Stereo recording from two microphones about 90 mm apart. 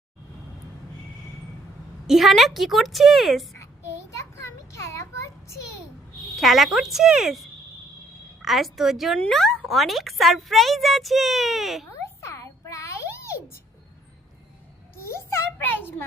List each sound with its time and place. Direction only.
2.0 s speech: centre (ahead or behind)
4.2 s children playing: 30° left (ahead or behind)
6.3 s speech: centre (ahead or behind)
9.1 s speech: 10° left (ahead or behind)
11.9 s a sound: 30° left (ahead or behind)
15.2 s a sound: 25° left (ahead or behind)